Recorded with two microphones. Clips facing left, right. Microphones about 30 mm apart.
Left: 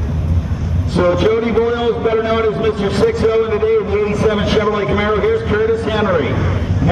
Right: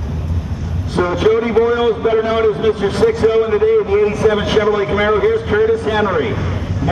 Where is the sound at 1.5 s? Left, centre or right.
Centre.